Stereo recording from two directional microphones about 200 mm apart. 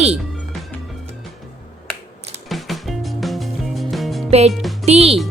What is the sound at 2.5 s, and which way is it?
Music, centre (ahead or behind).